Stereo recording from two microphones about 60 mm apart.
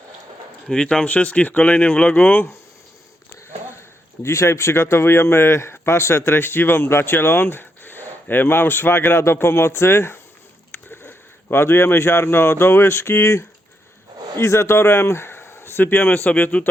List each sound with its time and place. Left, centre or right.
0.7 s speech: centre
1.0 s speech: left
4.2 s speech: left